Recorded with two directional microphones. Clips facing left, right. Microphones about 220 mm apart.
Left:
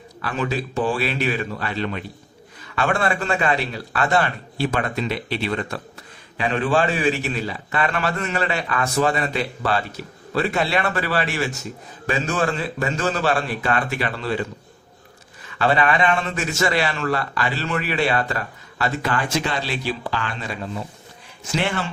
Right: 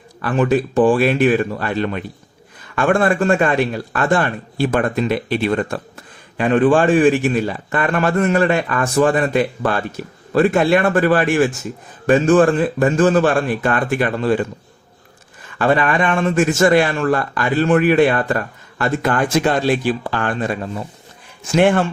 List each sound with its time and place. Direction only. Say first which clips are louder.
0.2 s a man's voice: right 9 dB; 50° right (ahead or behind)
15.5 s a man's voice: right 3 dB; 50° right (ahead or behind)